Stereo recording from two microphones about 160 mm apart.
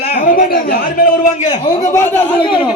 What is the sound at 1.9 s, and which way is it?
Speech, 15° left (ahead or behind).